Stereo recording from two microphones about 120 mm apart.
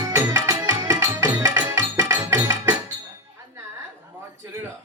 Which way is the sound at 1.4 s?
20° right (ahead or behind).